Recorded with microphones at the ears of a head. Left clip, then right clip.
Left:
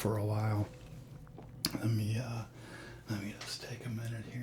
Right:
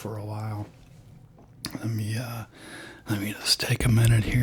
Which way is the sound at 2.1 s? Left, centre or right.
Right.